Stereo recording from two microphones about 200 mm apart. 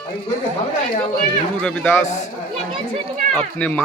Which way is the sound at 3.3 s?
5° left (ahead or behind).